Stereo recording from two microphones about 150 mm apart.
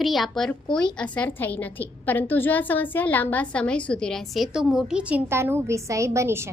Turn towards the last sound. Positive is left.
turn(degrees=-15)  # may be behind; listen again after turning